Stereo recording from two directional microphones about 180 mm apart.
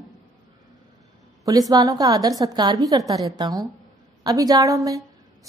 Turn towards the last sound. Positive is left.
turn(degrees=-20)  # may be behind; listen again after turning